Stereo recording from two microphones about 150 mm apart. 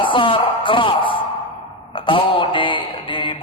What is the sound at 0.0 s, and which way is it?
Speech, 35° left (ahead or behind).